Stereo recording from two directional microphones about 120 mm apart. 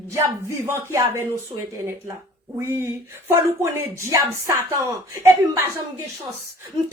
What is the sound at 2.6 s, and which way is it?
Speech, 25° right (ahead or behind).